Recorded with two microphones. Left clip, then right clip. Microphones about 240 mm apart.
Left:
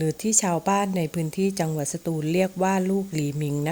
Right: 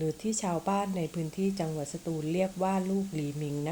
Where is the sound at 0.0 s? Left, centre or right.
Left.